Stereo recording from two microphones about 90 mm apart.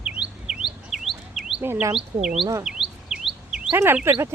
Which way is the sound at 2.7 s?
5° right (ahead or behind).